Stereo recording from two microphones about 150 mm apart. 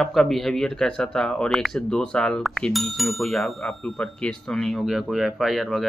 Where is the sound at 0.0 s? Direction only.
Centre (ahead or behind).